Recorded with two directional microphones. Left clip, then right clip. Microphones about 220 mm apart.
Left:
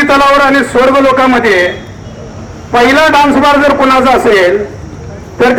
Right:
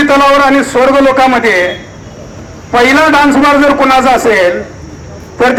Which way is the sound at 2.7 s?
50° right (ahead or behind).